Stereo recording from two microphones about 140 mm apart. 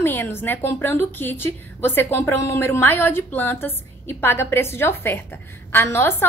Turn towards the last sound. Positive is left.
turn(degrees=15)  # may be behind; listen again after turning